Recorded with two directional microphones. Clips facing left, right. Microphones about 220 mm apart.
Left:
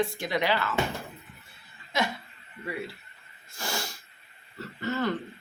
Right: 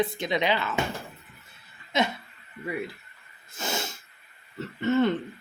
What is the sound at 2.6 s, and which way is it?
Speech, 20° right (ahead or behind).